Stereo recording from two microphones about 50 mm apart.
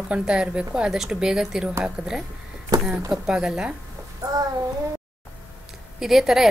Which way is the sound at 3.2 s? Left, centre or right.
Centre.